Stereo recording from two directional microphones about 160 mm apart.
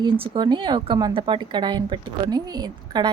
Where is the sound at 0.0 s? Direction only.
30° right (ahead or behind).